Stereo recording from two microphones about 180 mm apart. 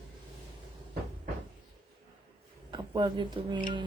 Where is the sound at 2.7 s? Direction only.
25° right (ahead or behind).